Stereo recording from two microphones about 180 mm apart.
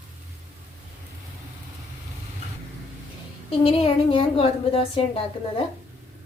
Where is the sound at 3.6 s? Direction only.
30° left (ahead or behind).